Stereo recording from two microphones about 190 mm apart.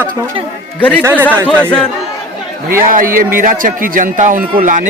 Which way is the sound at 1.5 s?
5° left (ahead or behind).